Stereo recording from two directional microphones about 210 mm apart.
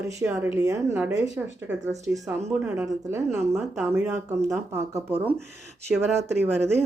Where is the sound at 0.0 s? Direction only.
15° right (ahead or behind).